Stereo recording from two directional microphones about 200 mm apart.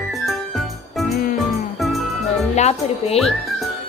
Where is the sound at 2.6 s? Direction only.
30° left (ahead or behind).